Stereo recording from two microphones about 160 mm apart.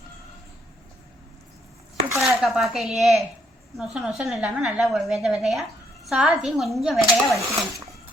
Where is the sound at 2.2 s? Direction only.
Centre (ahead or behind).